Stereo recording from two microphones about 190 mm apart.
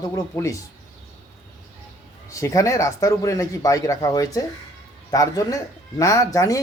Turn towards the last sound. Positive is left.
turn(degrees=15)  # may be behind; listen again after turning